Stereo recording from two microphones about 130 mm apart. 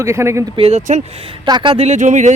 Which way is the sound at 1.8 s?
70° right (ahead or behind).